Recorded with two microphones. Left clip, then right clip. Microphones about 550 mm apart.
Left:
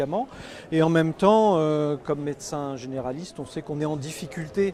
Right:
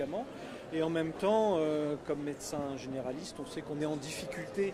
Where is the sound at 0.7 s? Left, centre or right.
Left.